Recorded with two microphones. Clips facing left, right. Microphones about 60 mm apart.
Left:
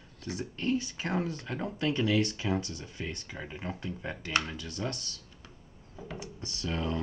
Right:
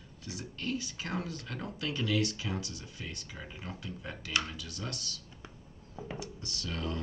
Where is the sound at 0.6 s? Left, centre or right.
Left.